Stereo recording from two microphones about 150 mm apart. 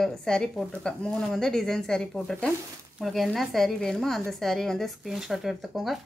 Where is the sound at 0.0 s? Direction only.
5° left (ahead or behind).